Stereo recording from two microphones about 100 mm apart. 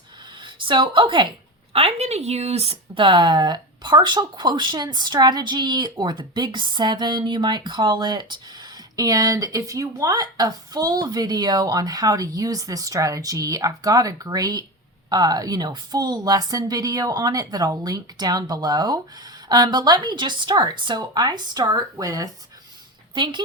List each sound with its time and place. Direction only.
0.3 s speech: 55° right (ahead or behind)
1.7 s a woman's voice: 85° right; by 22.3 s 35° right (ahead or behind)
23.1 s speech: 50° right (ahead or behind)